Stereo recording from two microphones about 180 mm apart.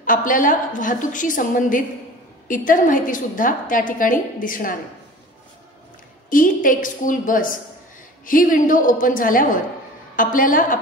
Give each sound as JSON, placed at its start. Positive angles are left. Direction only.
{"t": 0.0, "sound": "a woman's voice", "side_deg": 50}
{"t": 6.3, "sound": "a woman's voice", "side_deg": 50}